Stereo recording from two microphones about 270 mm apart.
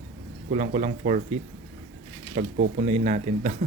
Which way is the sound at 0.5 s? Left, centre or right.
Right.